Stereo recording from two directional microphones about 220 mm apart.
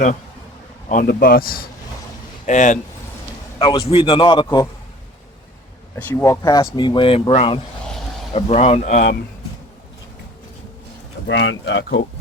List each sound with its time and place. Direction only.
0.9 s a man's voice: 40° left (ahead or behind)
3.6 s a man's voice: 20° left (ahead or behind)
6.0 s a man's voice: 10° left (ahead or behind); by 9.0 s 30° left (ahead or behind)
11.3 s speech: 60° left (ahead or behind)